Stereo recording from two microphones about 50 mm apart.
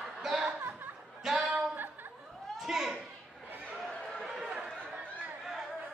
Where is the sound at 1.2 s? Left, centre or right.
Centre.